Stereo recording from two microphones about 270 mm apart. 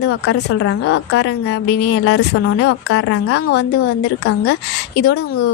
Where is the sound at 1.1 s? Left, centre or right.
Left.